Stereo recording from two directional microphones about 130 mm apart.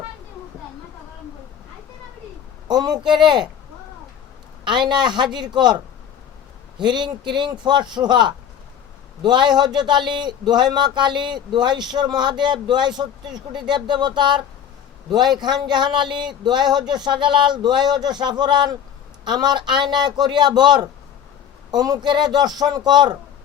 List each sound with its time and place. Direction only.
2.6 s speech: 30° right (ahead or behind)
4.6 s speech: 35° right (ahead or behind)
6.7 s speech: 35° right (ahead or behind)